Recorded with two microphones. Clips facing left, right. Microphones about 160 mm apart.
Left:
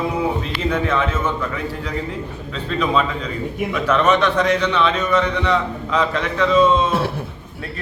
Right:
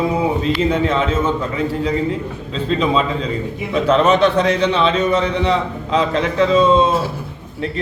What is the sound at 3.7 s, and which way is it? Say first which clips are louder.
A man's voice: right 4 dB; 30° right (ahead or behind).